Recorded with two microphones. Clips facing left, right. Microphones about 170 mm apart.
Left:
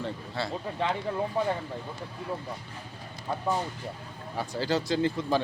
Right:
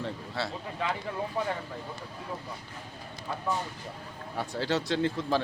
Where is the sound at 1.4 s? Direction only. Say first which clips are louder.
Left 3 dB; 25° left (ahead or behind).